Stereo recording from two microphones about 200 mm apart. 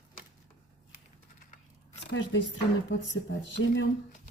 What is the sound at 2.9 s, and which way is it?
Speech, 70° left (ahead or behind).